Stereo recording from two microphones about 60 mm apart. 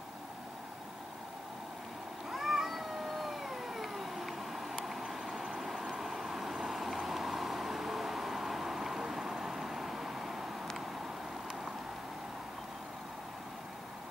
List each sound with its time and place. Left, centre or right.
2.3 s cat: centre
5.9 s vehicle: centre